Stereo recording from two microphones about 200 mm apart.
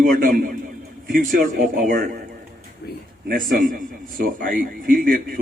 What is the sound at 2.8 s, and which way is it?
Speech, 50° left (ahead or behind).